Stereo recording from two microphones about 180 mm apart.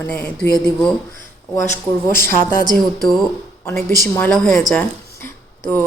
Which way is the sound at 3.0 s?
Centre (ahead or behind).